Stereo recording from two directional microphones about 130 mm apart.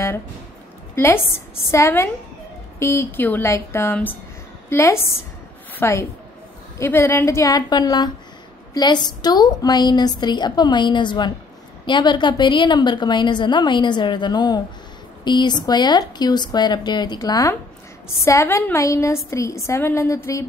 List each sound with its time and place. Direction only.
0.9 s a woman's voice: 20° left (ahead or behind)